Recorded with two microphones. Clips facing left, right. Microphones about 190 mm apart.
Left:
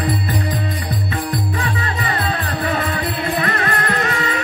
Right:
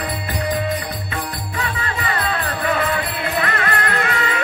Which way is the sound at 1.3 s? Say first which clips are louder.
Left 5 dB; 45° left (ahead or behind).